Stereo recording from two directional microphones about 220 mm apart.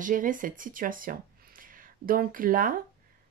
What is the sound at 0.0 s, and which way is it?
Speech, 35° right (ahead or behind).